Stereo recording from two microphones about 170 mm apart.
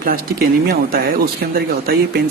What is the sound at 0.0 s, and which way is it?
Speech, 60° right (ahead or behind).